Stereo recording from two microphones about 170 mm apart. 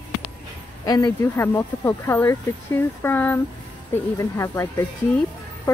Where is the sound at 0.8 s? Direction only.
20° left (ahead or behind).